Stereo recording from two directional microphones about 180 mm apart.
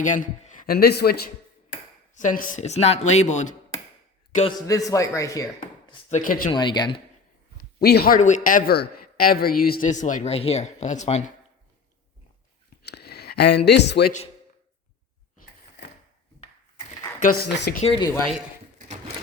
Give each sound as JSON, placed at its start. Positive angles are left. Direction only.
{"t": 0.0, "sound": "a man's voice", "side_deg": 45}
{"t": 2.1, "sound": "speech", "side_deg": 45}
{"t": 4.6, "sound": "speech", "side_deg": 20}
{"t": 6.1, "sound": "speech", "side_deg": 45}
{"t": 6.5, "sound": "speech", "side_deg": 25}
{"t": 7.8, "sound": "speech", "side_deg": 60}
{"t": 12.8, "sound": "speech", "side_deg": 60}
{"t": 17.2, "sound": "speech", "side_deg": 50}
{"t": 17.8, "sound": "speech", "side_deg": 30}